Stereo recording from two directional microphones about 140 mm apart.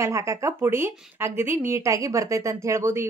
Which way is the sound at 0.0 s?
20° right (ahead or behind).